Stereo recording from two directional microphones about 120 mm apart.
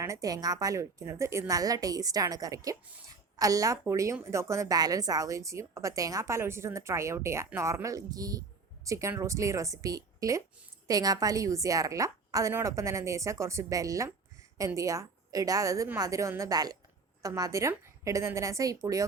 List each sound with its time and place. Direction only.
0.0 s a woman's voice: 25° right (ahead or behind)